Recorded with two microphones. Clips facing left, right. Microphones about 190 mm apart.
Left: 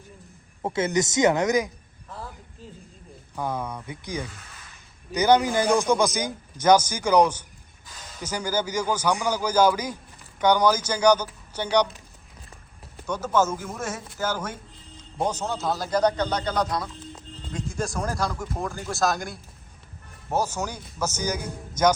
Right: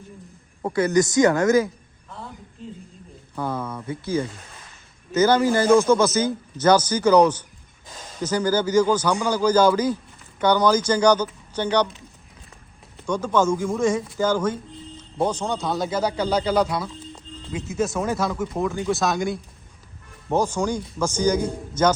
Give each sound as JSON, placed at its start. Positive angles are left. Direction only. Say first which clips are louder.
{"t": 0.6, "sound": "a man's voice", "louder": "right 5 dB", "side_deg": 25}
{"t": 3.3, "sound": "a man's voice", "louder": "right 2 dB", "side_deg": 15}
{"t": 13.1, "sound": "a man's voice", "louder": "right 3 dB", "side_deg": 5}